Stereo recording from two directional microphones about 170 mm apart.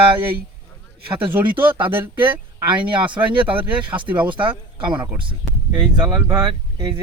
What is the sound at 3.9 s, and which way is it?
Speech, 10° right (ahead or behind).